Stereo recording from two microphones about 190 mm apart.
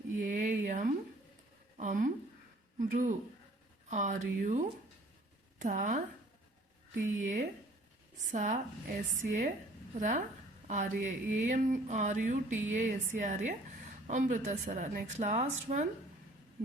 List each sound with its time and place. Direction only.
0.2 s a sound: 40° right (ahead or behind)
1.8 s a man's voice: 45° right (ahead or behind)
7.2 s a woman's voice: 40° right (ahead or behind)